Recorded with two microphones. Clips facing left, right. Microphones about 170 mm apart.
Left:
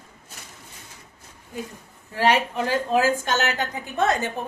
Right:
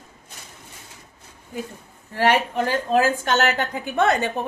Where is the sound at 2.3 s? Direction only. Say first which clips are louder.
Right 1 dB; 50° right (ahead or behind).